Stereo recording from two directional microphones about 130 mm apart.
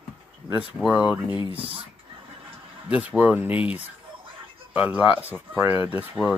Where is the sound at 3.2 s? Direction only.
10° right (ahead or behind).